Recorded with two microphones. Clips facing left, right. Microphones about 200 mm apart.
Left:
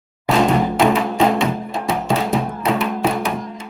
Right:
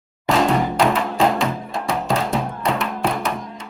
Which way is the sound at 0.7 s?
Centre (ahead or behind).